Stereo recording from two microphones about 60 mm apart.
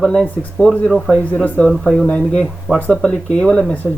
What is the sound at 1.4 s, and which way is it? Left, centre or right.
Speech, left.